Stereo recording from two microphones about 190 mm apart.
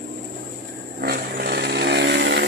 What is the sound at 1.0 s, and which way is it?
Chainsaw, 55° right (ahead or behind).